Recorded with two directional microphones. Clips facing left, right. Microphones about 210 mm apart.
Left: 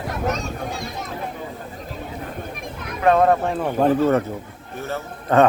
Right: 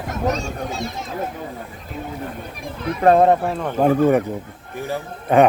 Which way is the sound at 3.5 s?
5° left (ahead or behind).